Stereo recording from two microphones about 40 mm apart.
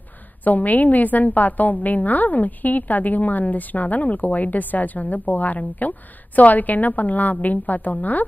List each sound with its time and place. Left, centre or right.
0.4 s a woman's voice: left